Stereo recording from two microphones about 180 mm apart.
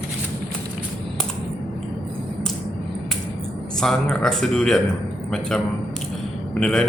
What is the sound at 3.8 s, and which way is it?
A man's voice, 5° left (ahead or behind).